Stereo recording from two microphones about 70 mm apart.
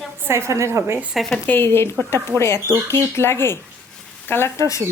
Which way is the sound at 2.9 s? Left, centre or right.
Left.